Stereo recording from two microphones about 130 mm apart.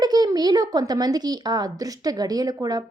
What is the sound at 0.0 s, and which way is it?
Speech, 30° right (ahead or behind).